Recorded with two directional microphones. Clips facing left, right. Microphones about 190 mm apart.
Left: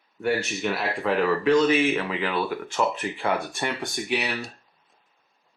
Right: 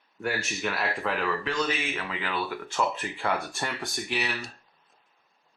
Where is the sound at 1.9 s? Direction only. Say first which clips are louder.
Left 7 dB; 20° left (ahead or behind).